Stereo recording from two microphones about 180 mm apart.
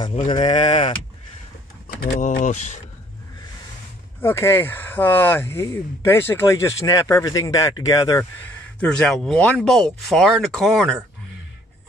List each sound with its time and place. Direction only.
0.1 s speech: 30° left (ahead or behind)
2.0 s speech: 45° left (ahead or behind)
4.2 s speech: 15° left (ahead or behind)
8.7 s speech: 5° left (ahead or behind)